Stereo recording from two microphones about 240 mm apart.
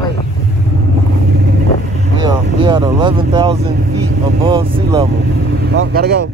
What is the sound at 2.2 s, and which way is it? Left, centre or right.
Vehicle, centre.